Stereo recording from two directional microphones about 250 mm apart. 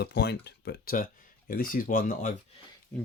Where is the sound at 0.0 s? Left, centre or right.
Left.